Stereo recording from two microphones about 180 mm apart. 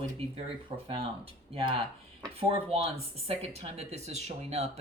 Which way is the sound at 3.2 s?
35° right (ahead or behind).